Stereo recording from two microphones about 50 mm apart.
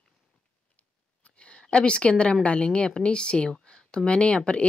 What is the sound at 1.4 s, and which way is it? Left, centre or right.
Speech, left.